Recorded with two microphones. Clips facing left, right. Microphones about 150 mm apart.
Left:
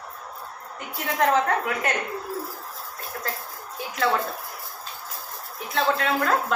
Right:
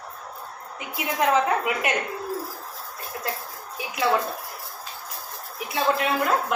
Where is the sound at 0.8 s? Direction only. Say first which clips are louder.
Left 1 dB; 10° right (ahead or behind).